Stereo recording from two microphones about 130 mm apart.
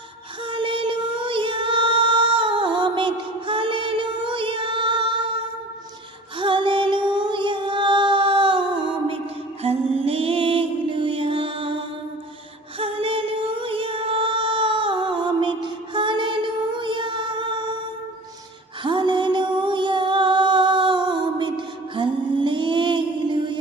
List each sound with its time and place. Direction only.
0.5 s music: 40° right (ahead or behind)
6.4 s child singing: 40° right (ahead or behind)
9.6 s music: 50° right (ahead or behind)
12.8 s music: 45° right (ahead or behind)
18.8 s music: 35° right (ahead or behind)